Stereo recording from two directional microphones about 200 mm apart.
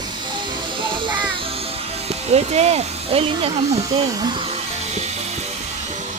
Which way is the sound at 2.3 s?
35° right (ahead or behind).